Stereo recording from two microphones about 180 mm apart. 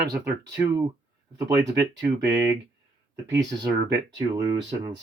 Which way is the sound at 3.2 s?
20° right (ahead or behind).